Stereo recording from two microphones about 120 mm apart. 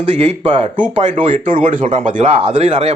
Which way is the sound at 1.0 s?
90° right.